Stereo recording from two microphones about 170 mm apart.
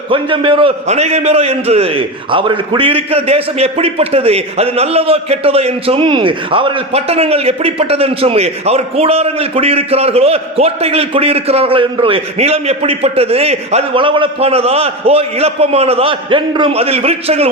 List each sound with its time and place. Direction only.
0.1 s a man's voice: 30° right (ahead or behind)